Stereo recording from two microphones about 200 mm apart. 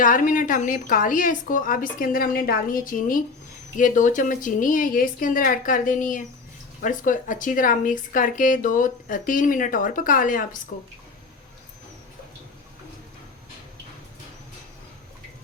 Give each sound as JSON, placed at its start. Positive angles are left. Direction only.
{"t": 0.0, "sound": "a woman's voice", "side_deg": 40}